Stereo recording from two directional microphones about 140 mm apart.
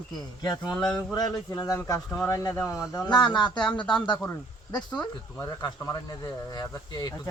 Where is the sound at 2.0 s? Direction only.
10° left (ahead or behind); by 3.7 s 35° left (ahead or behind).